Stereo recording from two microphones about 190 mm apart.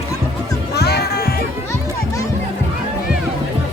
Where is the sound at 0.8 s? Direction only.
55° left (ahead or behind).